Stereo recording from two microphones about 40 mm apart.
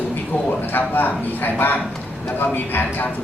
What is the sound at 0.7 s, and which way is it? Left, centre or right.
A man's voice, left.